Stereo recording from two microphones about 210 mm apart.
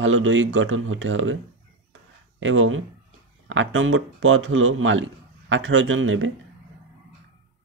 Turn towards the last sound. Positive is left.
turn(degrees=-65)  # may be behind; listen again after turning